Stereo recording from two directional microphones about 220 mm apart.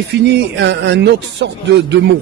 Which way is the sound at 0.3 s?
50° right (ahead or behind).